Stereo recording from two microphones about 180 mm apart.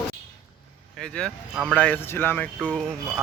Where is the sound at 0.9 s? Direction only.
5° left (ahead or behind).